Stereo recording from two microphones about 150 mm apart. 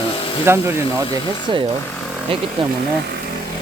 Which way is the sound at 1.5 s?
30° right (ahead or behind).